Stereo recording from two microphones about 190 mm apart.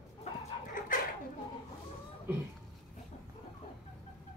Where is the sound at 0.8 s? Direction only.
45° left (ahead or behind).